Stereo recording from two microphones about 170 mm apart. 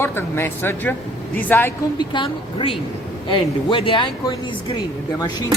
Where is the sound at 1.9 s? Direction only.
30° left (ahead or behind).